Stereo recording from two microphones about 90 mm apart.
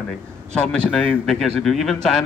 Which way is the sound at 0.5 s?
10° left (ahead or behind).